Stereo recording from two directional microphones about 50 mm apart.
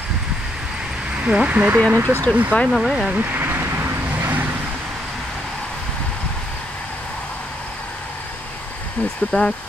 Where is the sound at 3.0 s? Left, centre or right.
Right.